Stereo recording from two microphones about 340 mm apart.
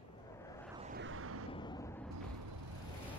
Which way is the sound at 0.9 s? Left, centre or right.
Right.